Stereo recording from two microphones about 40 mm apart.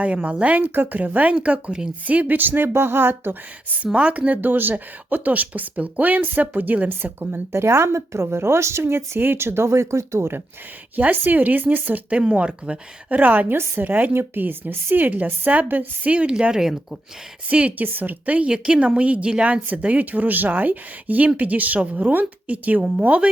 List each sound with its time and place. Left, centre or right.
0.0 s speech: right
2.7 s speech: right
3.9 s speech: right
4.4 s speech: right
11.1 s speech: right
12.1 s speech: right
13.1 s speech: right
14.1 s speech: right
16.0 s speech: right
16.3 s speech: centre
17.5 s speech: right
17.8 s speech: right
18.3 s speech: right